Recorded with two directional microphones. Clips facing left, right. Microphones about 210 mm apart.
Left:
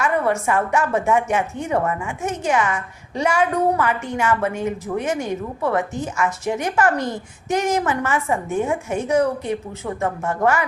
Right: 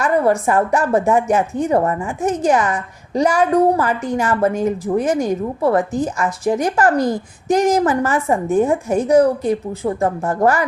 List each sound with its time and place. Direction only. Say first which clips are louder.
0.0 s a woman's voice: right 4 dB; 35° right (ahead or behind)